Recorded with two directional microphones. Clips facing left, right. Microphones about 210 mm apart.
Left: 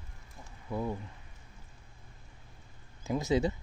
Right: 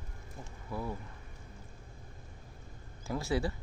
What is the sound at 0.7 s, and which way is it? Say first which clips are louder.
Speech: left 4 dB; 20° left (ahead or behind).